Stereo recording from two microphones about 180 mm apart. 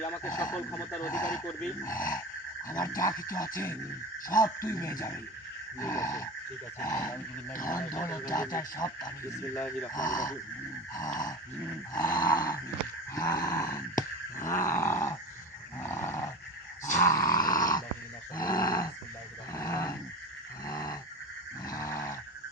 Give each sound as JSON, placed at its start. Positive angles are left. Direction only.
{"t": 0.0, "sound": "speech", "side_deg": 15}
{"t": 11.9, "sound": "speech", "side_deg": 20}
{"t": 19.5, "sound": "a sound", "side_deg": 15}
{"t": 21.7, "sound": "sheep", "side_deg": 15}